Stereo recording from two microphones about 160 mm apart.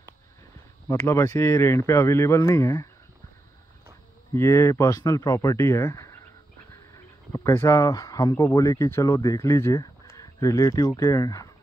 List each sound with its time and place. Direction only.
0.8 s speech: 15° left (ahead or behind)
4.3 s speech: 15° left (ahead or behind)